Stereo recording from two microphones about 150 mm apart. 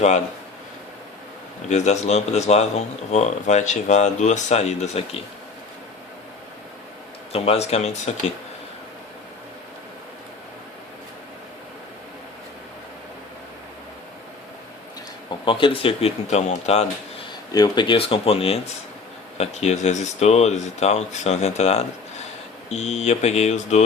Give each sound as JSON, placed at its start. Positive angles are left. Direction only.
{"t": 1.7, "sound": "speech", "side_deg": 50}
{"t": 7.3, "sound": "speech", "side_deg": 45}
{"t": 15.4, "sound": "speech", "side_deg": 35}
{"t": 17.5, "sound": "speech", "side_deg": 30}